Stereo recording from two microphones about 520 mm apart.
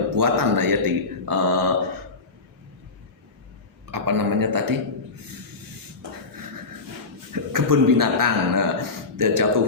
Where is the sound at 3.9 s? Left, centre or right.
Right.